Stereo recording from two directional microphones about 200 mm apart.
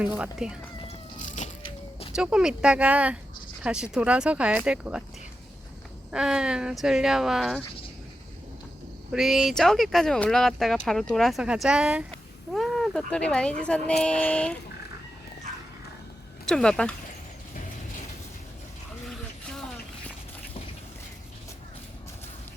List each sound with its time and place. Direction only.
0.2 s speech: 5° right (ahead or behind)
1.4 s a sound: 40° left (ahead or behind)
2.1 s speech: 5° right (ahead or behind)
6.1 s speech: 5° right (ahead or behind)
9.1 s speech: centre (ahead or behind)
16.5 s speech: 5° left (ahead or behind)